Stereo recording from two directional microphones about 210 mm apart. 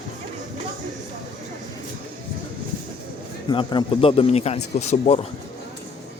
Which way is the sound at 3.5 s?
20° left (ahead or behind).